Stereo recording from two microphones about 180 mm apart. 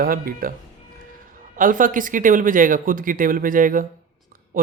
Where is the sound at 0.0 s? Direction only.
55° right (ahead or behind).